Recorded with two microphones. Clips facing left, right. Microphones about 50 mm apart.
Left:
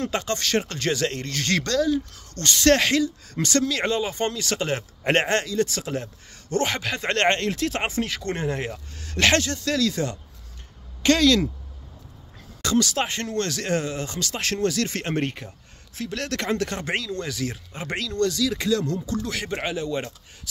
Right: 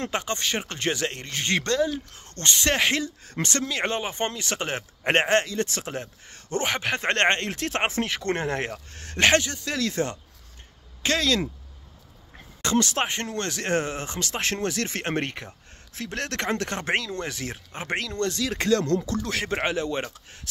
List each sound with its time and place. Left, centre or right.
0.1 s speech: right
2.9 s speech: right
9.2 s speech: centre
9.8 s speech: right
11.0 s speech: centre
12.6 s speech: right